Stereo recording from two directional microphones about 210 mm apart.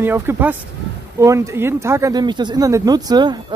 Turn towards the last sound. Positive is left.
turn(degrees=-20)  # may be behind; listen again after turning